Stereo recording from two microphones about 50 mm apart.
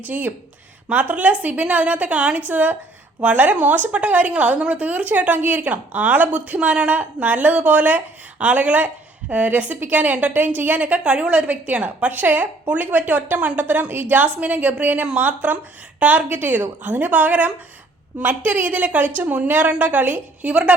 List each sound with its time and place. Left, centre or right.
0.0 s a woman's voice: right
10.3 s a woman's voice: right